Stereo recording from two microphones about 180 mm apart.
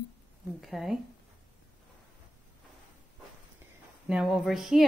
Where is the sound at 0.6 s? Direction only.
Centre (ahead or behind).